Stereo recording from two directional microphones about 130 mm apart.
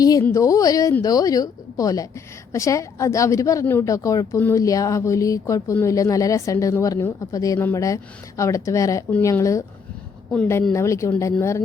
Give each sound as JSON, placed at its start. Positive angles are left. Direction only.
{"t": 0.0, "sound": "a woman's voice", "side_deg": 30}
{"t": 10.7, "sound": "a woman's voice", "side_deg": 25}